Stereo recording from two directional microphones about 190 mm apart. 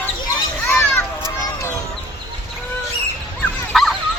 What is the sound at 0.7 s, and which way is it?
Children playing, 10° left (ahead or behind).